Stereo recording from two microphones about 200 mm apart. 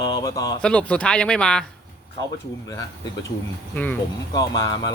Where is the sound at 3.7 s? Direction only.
10° left (ahead or behind).